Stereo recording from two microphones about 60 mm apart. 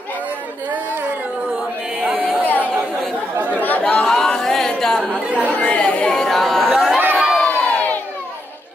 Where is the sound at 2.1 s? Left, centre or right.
Right.